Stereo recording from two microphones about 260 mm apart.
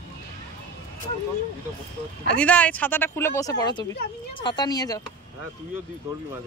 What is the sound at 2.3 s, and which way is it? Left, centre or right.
Speech, centre.